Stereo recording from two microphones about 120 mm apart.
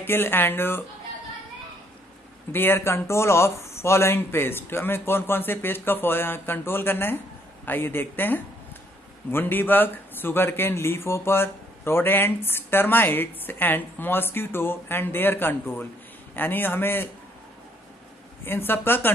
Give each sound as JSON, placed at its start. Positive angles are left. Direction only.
{"t": 0.0, "sound": "a man's voice", "side_deg": 20}
{"t": 2.5, "sound": "a man's voice", "side_deg": 20}
{"t": 18.4, "sound": "a man's voice", "side_deg": 20}